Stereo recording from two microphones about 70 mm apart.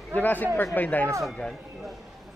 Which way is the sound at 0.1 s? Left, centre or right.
Left.